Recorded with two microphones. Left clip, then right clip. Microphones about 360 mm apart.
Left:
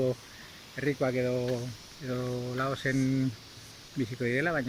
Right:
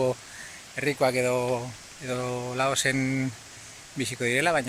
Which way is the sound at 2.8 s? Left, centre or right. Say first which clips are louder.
Right 3 dB; right.